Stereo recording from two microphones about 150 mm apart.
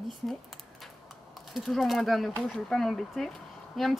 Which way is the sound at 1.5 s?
Centre (ahead or behind).